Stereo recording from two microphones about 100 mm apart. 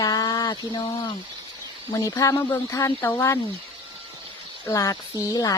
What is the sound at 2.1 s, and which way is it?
Speech, 25° left (ahead or behind).